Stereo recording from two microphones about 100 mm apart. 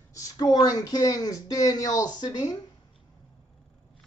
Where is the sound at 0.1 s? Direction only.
40° left (ahead or behind).